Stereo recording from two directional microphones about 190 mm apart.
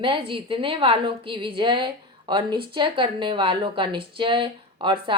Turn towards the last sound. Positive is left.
turn(degrees=-25)  # may be behind; listen again after turning